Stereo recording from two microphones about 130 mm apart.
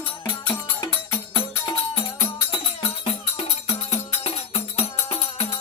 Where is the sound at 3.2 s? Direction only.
55° left (ahead or behind).